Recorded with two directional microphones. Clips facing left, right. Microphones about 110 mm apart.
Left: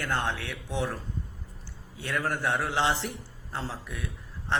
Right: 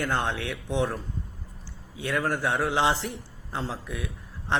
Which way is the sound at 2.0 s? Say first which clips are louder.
Right 3 dB; 15° right (ahead or behind).